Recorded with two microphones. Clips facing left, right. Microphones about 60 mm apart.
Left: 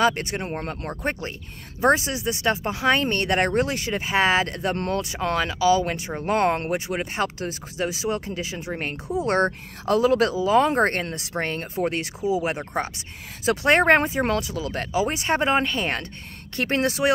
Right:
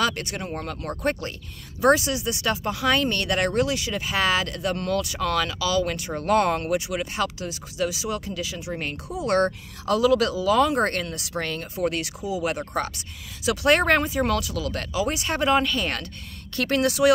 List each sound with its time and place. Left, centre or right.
0.0 s speech: left